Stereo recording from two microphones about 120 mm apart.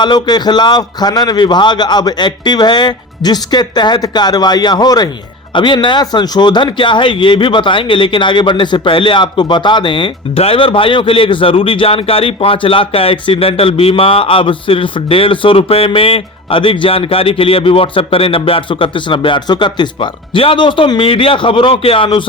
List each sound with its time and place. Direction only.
0.0 s a man's voice: 40° left (ahead or behind)